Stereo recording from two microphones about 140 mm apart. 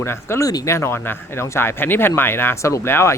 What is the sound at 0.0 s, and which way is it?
Speech, 20° left (ahead or behind).